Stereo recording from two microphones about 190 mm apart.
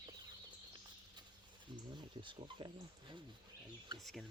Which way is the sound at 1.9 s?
25° right (ahead or behind).